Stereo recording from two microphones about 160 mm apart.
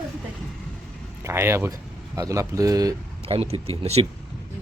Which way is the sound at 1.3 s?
15° right (ahead or behind).